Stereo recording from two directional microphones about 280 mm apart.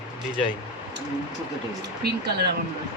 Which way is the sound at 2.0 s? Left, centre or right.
Right.